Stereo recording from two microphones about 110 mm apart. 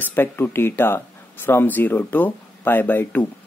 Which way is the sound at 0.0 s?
20° left (ahead or behind).